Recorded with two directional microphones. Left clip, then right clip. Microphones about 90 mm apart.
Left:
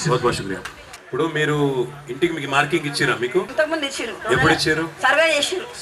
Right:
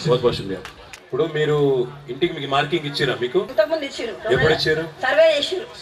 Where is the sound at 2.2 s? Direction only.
35° left (ahead or behind).